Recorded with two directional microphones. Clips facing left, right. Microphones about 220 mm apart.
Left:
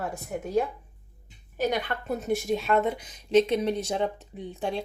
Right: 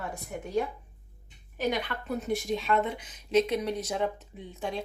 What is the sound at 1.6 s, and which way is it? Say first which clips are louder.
A woman's voice: left 3 dB; 45° left (ahead or behind).